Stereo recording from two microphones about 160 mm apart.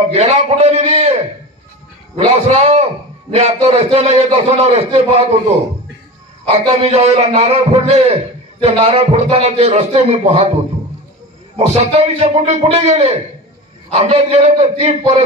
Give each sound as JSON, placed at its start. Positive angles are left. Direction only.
{"t": 0.1, "sound": "a man's voice", "side_deg": -45}
{"t": 2.1, "sound": "a man's voice", "side_deg": -40}
{"t": 6.5, "sound": "a man's voice", "side_deg": -40}
{"t": 11.5, "sound": "a man's voice", "side_deg": -40}